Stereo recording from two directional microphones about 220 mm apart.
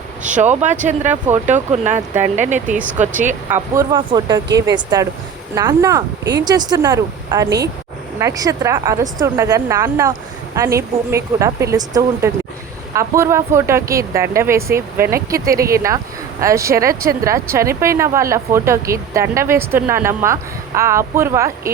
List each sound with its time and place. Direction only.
0.2 s speech: 35° right (ahead or behind)
3.5 s speech: 15° right (ahead or behind)
5.5 s speech: 15° right (ahead or behind)